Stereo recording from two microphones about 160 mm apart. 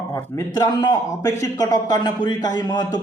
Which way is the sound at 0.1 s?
25° left (ahead or behind).